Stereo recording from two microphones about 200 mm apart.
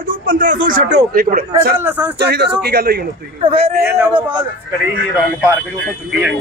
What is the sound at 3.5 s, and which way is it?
Speech, 30° right (ahead or behind).